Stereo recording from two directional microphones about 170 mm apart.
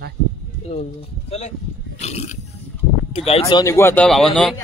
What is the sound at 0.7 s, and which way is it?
Speech, 40° left (ahead or behind).